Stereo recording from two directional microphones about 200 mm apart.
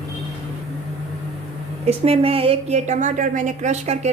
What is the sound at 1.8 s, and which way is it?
A woman's voice, 30° right (ahead or behind).